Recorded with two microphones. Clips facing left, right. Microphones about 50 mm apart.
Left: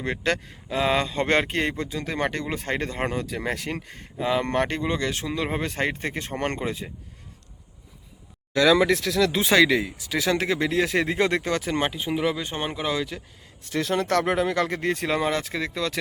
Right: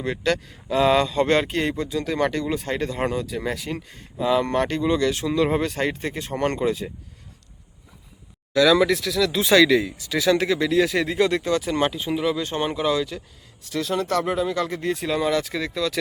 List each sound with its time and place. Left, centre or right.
0.0 s speech: left
0.7 s speech: centre; by 4.0 s left
4.2 s speech: left
5.7 s speech: left
6.3 s speech: left
8.5 s speech: left
9.0 s speech: left
11.9 s speech: centre
13.7 s speech: left
15.4 s speech: left